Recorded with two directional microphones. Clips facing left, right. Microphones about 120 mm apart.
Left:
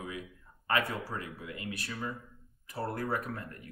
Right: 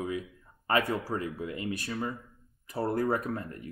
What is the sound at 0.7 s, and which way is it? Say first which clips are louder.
Speech: right 4 dB; 35° right (ahead or behind).